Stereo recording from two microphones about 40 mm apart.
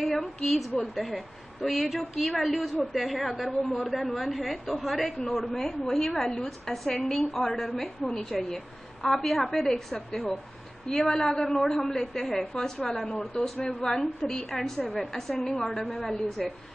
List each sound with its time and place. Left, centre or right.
0.0 s a woman's voice: centre
5.6 s a woman's voice: centre
13.1 s speech: left
13.7 s a woman's voice: centre